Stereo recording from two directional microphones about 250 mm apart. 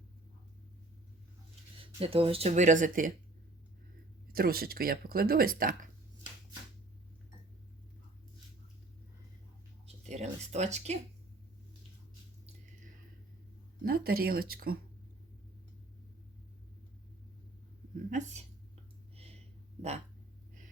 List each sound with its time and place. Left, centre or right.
1.8 s speech: right
4.3 s speech: right
9.8 s a sound: right
13.8 s speech: right
18.1 s speech: right
19.1 s a sound: right